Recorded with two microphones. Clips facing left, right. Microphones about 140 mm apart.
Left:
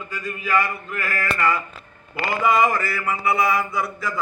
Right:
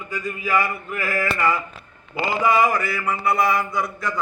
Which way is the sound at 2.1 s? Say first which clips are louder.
Right 1 dB; 20° right (ahead or behind).